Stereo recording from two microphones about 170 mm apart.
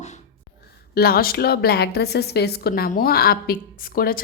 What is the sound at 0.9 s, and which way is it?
A woman's voice, 65° left (ahead or behind).